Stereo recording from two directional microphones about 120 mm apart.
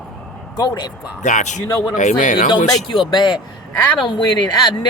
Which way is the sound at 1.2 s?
90° left.